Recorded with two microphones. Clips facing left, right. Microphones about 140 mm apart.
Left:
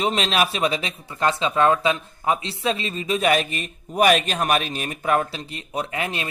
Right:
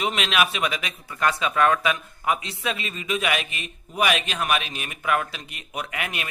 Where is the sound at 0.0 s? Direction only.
35° left (ahead or behind).